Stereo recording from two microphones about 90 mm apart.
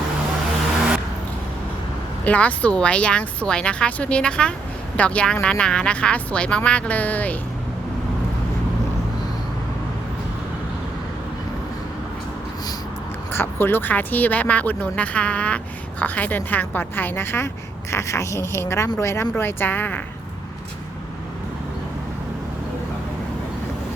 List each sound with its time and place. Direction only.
2.2 s speech: 15° left (ahead or behind)
13.3 s speech: 25° left (ahead or behind)